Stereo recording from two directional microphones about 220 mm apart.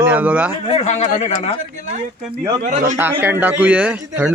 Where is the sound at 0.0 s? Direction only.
10° right (ahead or behind).